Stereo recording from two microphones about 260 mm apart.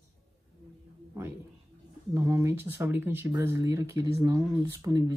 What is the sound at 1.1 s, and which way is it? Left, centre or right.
Speech, centre.